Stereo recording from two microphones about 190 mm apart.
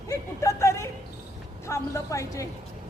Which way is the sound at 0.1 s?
15° left (ahead or behind).